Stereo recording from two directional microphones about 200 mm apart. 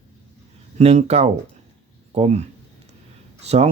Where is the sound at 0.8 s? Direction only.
30° right (ahead or behind).